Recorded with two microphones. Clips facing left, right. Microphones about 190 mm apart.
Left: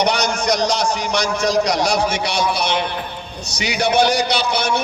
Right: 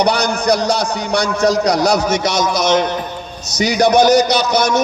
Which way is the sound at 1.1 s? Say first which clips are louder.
Right 5 dB; 35° right (ahead or behind).